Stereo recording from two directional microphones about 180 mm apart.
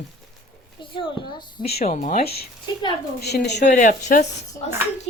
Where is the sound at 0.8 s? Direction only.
25° left (ahead or behind).